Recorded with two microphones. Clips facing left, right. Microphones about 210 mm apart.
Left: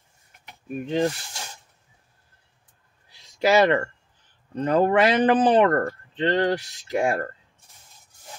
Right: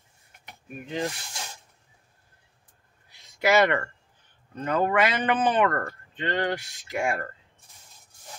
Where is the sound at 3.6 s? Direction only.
30° left (ahead or behind).